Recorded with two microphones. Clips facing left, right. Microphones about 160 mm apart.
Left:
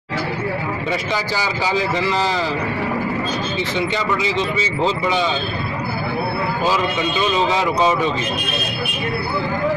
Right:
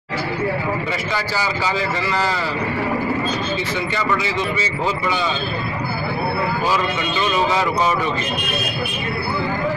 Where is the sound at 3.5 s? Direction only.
20° left (ahead or behind).